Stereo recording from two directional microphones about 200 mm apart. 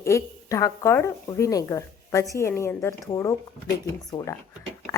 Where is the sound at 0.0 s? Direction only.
15° left (ahead or behind).